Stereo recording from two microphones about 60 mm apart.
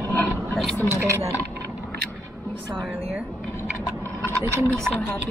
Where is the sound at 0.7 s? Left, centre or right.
Left.